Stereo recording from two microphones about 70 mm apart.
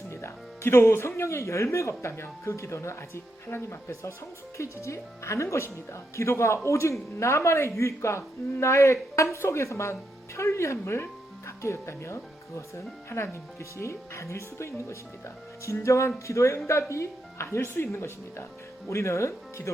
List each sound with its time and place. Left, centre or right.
0.1 s speech: left